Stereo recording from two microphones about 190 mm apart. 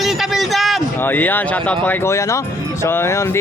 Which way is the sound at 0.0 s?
Centre (ahead or behind).